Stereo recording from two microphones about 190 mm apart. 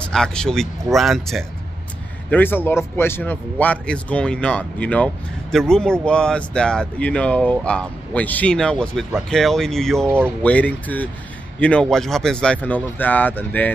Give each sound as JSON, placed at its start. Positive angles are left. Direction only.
{"t": 0.0, "sound": "speech", "side_deg": 5}
{"t": 2.3, "sound": "a man's voice", "side_deg": 10}